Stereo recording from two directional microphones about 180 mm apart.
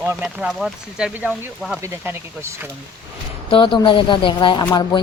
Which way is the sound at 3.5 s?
25° left (ahead or behind).